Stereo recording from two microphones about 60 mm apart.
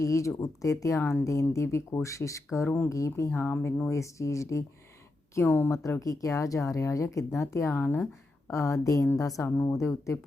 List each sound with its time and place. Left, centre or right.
0.0 s speech: left
2.6 s speech: left
2.9 s speech: left
3.3 s speech: left
3.8 s speech: left
5.5 s speech: left
6.0 s speech: left
7.7 s speech: left
8.4 s speech: left